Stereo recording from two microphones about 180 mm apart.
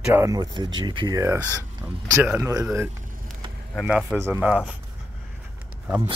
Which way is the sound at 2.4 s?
15° right (ahead or behind).